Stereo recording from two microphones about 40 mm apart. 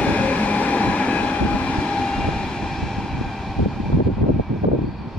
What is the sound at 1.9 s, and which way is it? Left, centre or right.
Vehicle, centre.